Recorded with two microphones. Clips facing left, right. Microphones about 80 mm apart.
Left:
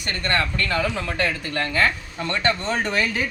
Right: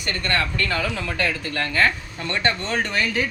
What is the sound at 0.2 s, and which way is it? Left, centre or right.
Speech, left.